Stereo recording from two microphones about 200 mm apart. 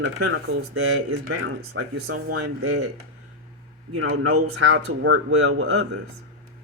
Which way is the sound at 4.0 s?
90° right.